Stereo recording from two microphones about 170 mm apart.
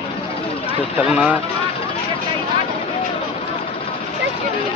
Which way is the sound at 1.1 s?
5° right (ahead or behind).